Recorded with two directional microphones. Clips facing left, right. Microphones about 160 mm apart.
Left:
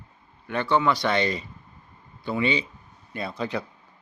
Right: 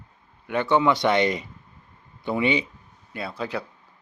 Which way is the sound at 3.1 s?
5° right (ahead or behind).